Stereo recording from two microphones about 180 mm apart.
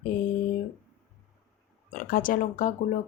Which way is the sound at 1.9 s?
50° left (ahead or behind).